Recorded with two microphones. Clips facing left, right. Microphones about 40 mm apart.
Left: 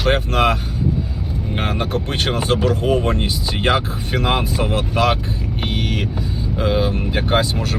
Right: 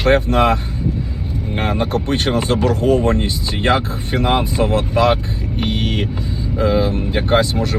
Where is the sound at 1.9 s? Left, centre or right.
Left.